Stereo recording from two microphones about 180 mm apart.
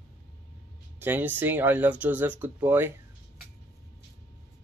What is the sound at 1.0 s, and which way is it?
Speech, 10° right (ahead or behind).